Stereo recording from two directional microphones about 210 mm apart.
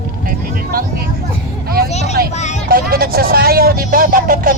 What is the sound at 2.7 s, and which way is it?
Vehicle, 45° right (ahead or behind).